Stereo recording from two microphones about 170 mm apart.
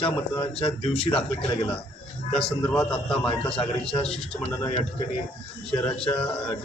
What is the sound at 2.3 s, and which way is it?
A man's voice, 5° left (ahead or behind).